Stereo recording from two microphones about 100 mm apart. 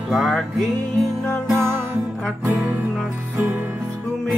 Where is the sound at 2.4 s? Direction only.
15° right (ahead or behind).